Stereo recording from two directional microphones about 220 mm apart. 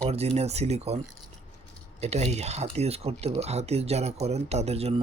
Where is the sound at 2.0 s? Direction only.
30° right (ahead or behind).